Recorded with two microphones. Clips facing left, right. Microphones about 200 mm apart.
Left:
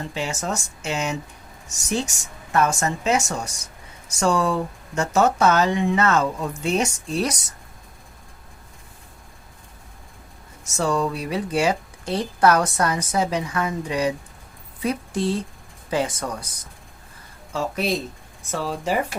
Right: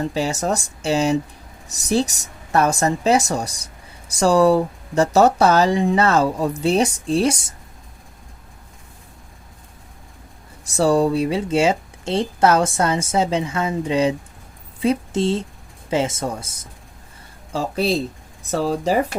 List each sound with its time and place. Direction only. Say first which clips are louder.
0.1 s speech: right 6 dB; 35° right (ahead or behind)
10.7 s a woman's voice: right 6 dB; 35° right (ahead or behind)